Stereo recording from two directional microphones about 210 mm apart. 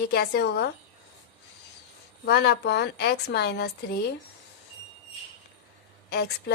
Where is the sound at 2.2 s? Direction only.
50° left (ahead or behind).